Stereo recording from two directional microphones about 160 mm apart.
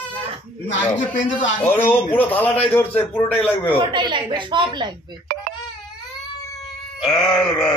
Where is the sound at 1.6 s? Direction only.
10° left (ahead or behind).